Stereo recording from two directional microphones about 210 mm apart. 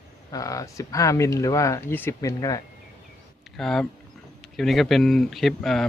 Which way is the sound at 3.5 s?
Centre (ahead or behind).